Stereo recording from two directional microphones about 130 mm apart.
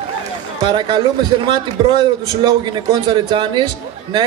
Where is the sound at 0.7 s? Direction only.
35° right (ahead or behind).